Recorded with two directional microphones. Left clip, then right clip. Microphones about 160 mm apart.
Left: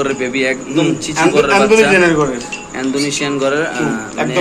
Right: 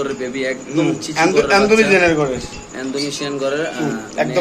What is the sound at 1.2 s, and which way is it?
A man's voice, 75° right (ahead or behind).